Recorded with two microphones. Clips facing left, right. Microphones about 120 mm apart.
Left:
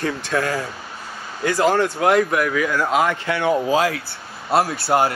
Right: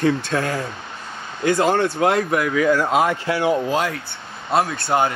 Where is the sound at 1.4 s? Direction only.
25° right (ahead or behind).